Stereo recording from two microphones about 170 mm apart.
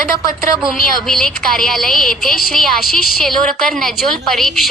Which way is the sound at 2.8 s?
60° left (ahead or behind).